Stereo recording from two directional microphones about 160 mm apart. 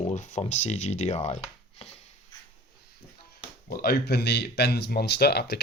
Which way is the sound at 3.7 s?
75° left (ahead or behind).